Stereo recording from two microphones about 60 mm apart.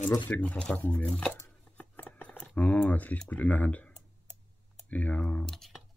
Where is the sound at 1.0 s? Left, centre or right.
Centre.